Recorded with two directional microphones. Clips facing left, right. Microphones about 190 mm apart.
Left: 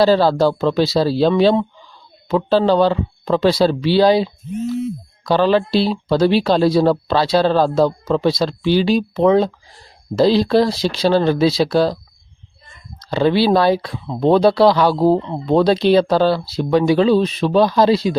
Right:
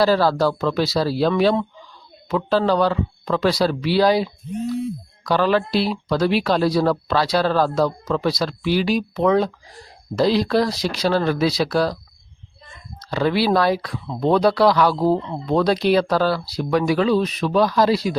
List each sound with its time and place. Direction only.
0.0 s speech: 25° left (ahead or behind)
13.0 s speech: 25° left (ahead or behind)